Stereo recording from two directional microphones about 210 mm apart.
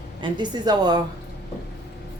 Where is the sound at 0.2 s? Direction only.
20° right (ahead or behind).